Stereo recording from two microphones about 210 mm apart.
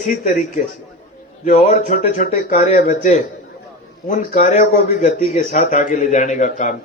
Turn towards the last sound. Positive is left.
turn(degrees=35)  # may be behind; listen again after turning